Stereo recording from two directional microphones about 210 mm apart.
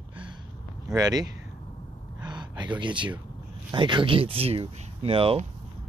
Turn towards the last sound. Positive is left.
turn(degrees=-25)  # may be behind; listen again after turning